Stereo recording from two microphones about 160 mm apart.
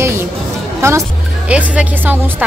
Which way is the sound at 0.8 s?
15° right (ahead or behind).